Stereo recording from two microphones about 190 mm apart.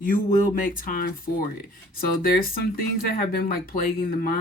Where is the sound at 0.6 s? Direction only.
45° left (ahead or behind).